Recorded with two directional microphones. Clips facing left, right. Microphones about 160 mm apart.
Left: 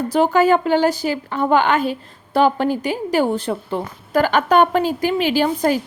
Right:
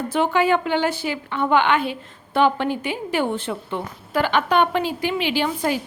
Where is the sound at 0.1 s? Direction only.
40° left (ahead or behind).